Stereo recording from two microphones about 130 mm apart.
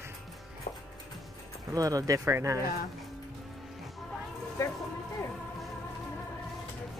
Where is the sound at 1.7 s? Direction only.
25° right (ahead or behind).